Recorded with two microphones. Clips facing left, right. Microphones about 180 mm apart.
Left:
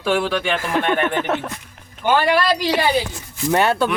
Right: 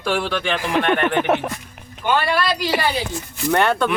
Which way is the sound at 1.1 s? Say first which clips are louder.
Right 3 dB; 15° right (ahead or behind).